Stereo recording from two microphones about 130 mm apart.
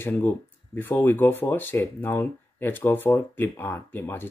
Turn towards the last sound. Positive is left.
turn(degrees=15)  # may be behind; listen again after turning